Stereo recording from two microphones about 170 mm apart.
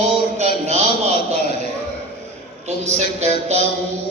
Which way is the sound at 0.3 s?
40° right (ahead or behind).